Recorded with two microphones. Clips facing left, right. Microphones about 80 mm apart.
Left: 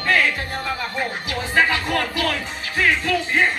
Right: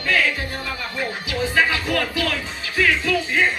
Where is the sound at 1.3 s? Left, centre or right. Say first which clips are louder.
Even; left.